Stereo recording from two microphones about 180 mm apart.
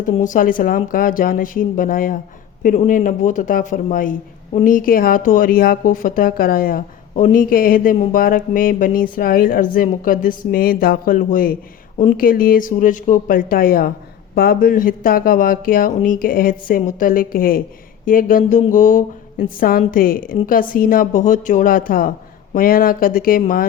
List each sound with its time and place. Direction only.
0.1 s speech: 45° left (ahead or behind)